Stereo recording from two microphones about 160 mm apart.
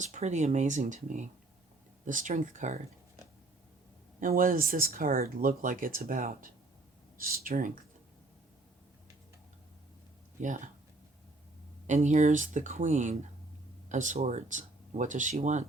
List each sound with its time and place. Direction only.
0.0 s speech: 50° right (ahead or behind)
4.2 s speech: 60° right (ahead or behind)
10.4 s speech: 50° right (ahead or behind)
11.9 s speech: 45° right (ahead or behind)